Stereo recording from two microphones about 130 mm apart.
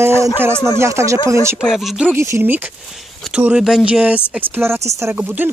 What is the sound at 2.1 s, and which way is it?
Speech, 20° right (ahead or behind).